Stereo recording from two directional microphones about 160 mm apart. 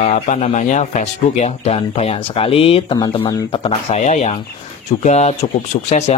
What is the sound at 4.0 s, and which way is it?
Speech, 45° left (ahead or behind).